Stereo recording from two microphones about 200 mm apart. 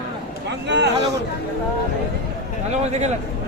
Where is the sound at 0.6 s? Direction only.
60° right (ahead or behind).